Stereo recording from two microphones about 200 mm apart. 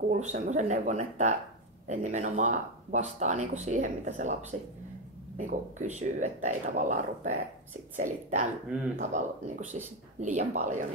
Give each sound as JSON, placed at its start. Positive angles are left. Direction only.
{"t": 0.1, "sound": "speech", "side_deg": -35}